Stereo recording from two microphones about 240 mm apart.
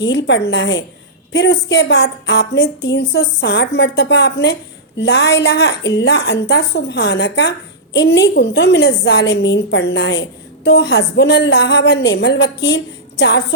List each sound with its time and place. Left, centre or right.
0.0 s a woman's voice: left